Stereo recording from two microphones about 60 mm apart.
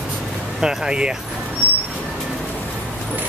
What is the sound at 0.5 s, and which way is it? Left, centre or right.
Speech, centre.